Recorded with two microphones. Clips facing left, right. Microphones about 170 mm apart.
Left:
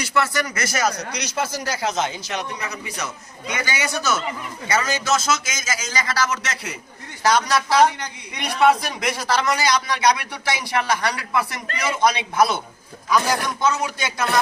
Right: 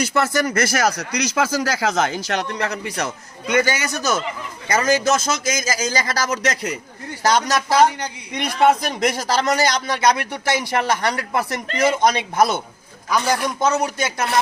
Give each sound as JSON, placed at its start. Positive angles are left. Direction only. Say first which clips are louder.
{"t": 0.0, "sound": "a man's voice", "louder": "right 3 dB", "side_deg": -45}
{"t": 8.4, "sound": "a man's voice", "louder": "right 1 dB", "side_deg": -45}